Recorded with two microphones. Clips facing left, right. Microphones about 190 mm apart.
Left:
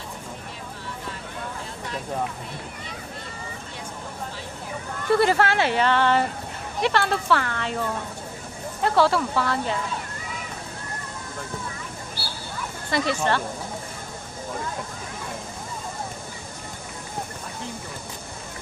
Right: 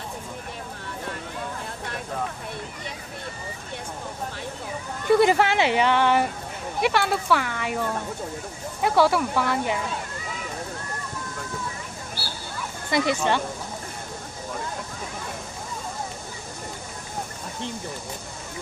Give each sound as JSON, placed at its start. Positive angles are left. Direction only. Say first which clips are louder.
{"t": 5.1, "sound": "speech", "louder": "right 1 dB", "side_deg": -15}
{"t": 8.8, "sound": "speech", "louder": "even", "side_deg": -10}
{"t": 12.9, "sound": "speech", "louder": "right 1 dB", "side_deg": -15}